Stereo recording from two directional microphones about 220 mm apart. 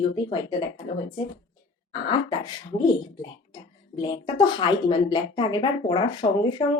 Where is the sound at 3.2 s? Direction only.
20° left (ahead or behind).